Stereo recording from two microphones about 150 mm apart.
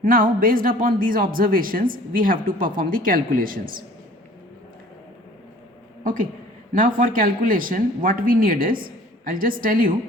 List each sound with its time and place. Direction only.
0.0 s speech: 70° right (ahead or behind)
6.0 s a woman's voice: 65° right (ahead or behind)